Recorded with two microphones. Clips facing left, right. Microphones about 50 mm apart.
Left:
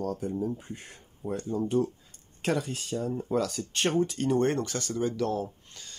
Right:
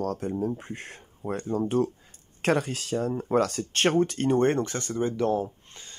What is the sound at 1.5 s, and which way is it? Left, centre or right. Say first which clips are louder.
Speech: right 2 dB; right.